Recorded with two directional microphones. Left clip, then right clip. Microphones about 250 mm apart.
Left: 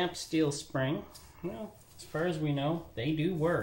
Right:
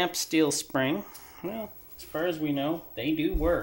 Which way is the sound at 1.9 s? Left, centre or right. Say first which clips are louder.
Right 3 dB; centre.